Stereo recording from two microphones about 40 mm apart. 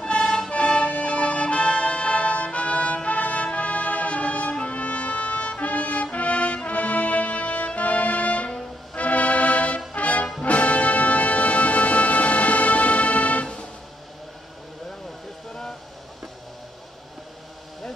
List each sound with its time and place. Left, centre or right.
0.0 s music: left